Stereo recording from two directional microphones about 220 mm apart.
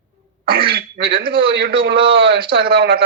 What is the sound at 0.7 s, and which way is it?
Speech, 45° right (ahead or behind).